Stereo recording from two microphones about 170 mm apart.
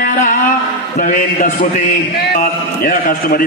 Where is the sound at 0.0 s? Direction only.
50° left (ahead or behind).